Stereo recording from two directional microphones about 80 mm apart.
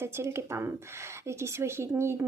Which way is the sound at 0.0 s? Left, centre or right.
Right.